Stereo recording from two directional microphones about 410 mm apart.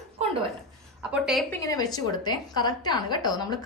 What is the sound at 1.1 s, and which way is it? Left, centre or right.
A woman's voice, centre.